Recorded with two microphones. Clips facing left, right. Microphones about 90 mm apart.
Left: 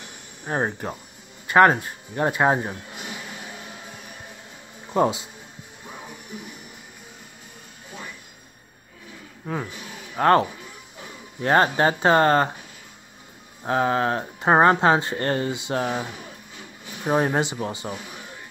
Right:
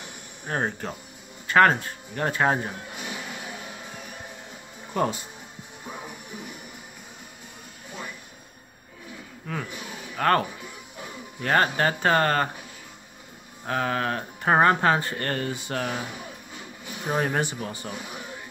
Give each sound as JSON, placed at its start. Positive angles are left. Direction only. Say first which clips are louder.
{"t": 0.5, "sound": "speech", "louder": "left 3 dB", "side_deg": 15}
{"t": 4.9, "sound": "speech", "louder": "left 5 dB", "side_deg": 20}
{"t": 9.5, "sound": "speech", "louder": "left 3 dB", "side_deg": 25}
{"t": 11.4, "sound": "speech", "louder": "left 4 dB", "side_deg": 25}
{"t": 13.7, "sound": "speech", "louder": "left 5 dB", "side_deg": 25}